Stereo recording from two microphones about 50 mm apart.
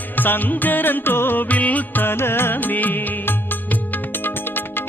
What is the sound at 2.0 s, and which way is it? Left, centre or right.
Music, left.